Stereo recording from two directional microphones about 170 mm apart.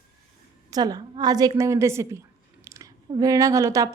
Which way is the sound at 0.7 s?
25° right (ahead or behind).